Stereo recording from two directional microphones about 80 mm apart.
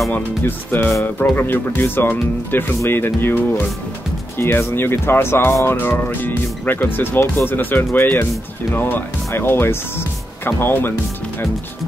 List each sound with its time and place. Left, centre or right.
0.1 s speech: left